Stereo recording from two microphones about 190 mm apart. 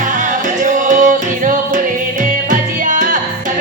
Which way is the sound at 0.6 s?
40° right (ahead or behind).